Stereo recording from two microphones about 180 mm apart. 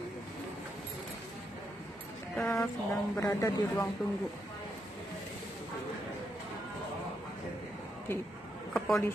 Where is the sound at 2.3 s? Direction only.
10° left (ahead or behind).